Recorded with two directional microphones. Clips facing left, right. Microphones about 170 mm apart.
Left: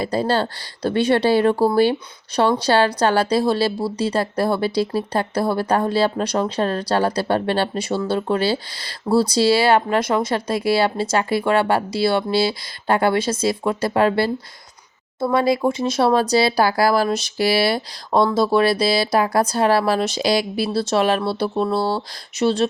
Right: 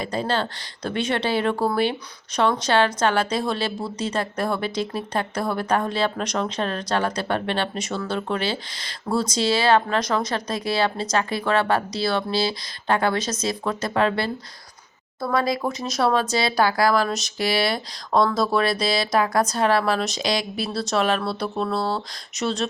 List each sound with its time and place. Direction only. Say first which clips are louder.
0.0 s speech: left 5 dB; 35° left (ahead or behind)
21.5 s speech: left 4 dB; 5° left (ahead or behind)
22.4 s speech: left 7 dB; 30° left (ahead or behind)